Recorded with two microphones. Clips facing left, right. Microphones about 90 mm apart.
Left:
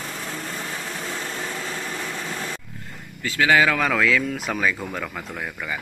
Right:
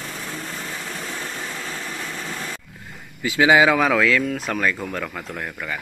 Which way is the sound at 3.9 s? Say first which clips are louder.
Right 2 dB; centre (ahead or behind).